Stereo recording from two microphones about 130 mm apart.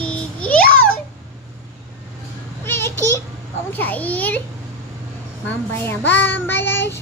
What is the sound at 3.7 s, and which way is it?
Child singing, 15° left (ahead or behind).